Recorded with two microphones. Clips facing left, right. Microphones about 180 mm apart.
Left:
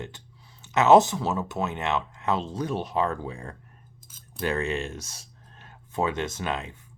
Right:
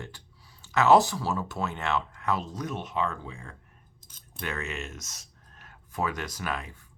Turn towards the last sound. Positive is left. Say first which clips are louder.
# left 3 dB
turn(degrees=25)  # may be behind; listen again after turning